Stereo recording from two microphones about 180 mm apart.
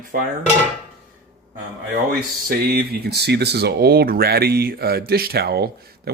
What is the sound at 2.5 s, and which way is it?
Speech, 55° right (ahead or behind).